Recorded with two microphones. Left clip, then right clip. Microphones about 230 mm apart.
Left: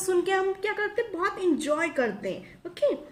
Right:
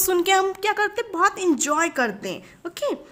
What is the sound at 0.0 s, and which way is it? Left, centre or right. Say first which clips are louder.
A woman's voice: right 6 dB; right.